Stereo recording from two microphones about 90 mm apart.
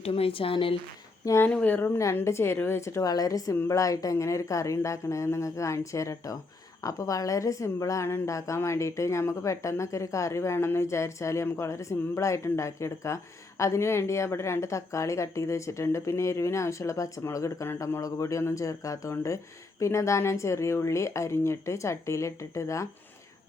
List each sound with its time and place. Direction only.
0.1 s speech: 90° left
1.2 s speech: 35° left (ahead or behind)
1.5 s a woman's voice: 20° left (ahead or behind)
3.0 s a woman's voice: 45° left (ahead or behind)